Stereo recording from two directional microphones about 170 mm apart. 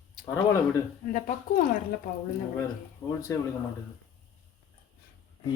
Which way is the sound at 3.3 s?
20° left (ahead or behind).